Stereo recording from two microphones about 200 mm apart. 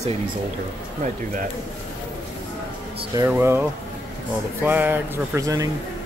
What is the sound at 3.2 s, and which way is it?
Speech, 10° right (ahead or behind).